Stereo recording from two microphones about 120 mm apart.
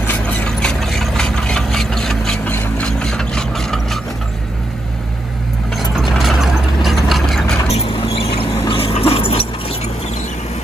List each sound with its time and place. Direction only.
0.0 s engine: 15° left (ahead or behind)
2.5 s vehicle: 10° left (ahead or behind)
5.9 s mechanisms: centre (ahead or behind)
7.6 s a sound: 60° left (ahead or behind)